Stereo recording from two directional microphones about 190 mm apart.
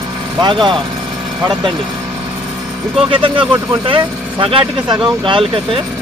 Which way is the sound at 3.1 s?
25° right (ahead or behind).